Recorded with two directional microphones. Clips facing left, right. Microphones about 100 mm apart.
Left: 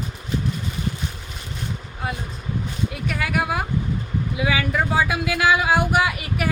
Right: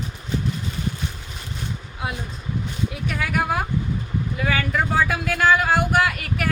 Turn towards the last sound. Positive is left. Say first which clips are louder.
# even
turn(degrees=10)  # may be behind; listen again after turning